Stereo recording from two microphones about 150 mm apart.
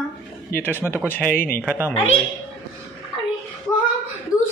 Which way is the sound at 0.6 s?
15° left (ahead or behind).